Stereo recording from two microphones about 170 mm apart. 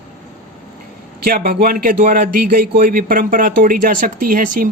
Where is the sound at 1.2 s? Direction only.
60° right (ahead or behind).